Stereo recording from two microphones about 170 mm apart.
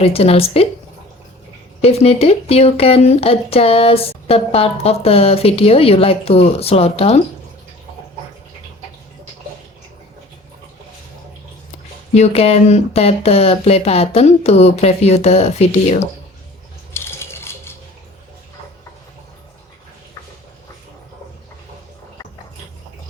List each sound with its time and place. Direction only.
0.0 s speech: 35° left (ahead or behind)
1.8 s speech: 35° left (ahead or behind)
12.1 s speech: 40° left (ahead or behind)
16.9 s a sound: 15° left (ahead or behind)